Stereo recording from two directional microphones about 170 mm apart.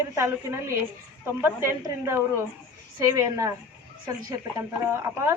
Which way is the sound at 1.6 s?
15° right (ahead or behind).